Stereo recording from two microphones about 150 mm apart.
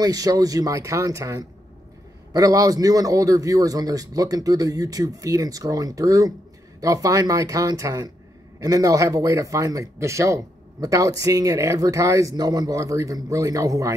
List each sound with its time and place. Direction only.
0.0 s a man's voice: 25° right (ahead or behind)